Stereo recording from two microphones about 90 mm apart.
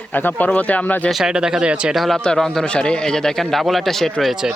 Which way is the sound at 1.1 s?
5° right (ahead or behind).